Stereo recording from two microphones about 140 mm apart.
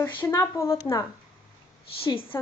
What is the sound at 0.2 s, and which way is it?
Speech, 20° left (ahead or behind).